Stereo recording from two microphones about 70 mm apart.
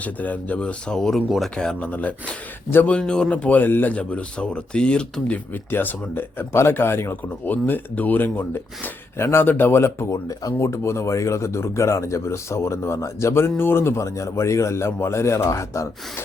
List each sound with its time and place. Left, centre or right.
0.0 s a man's voice: left
3.9 s speech: centre
5.7 s speech: left
10.1 s speech: left